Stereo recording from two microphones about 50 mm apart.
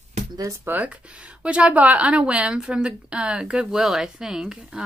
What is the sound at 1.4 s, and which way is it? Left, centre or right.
Speech, right.